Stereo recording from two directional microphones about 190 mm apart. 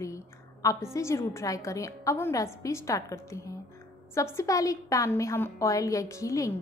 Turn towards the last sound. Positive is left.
turn(degrees=15)  # may be behind; listen again after turning